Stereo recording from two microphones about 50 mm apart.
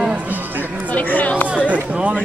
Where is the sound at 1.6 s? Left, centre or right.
Right.